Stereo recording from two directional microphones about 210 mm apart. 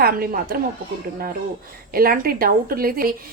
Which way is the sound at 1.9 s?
45° right (ahead or behind).